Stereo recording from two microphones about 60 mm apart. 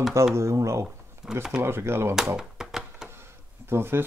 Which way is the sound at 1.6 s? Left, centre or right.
Right.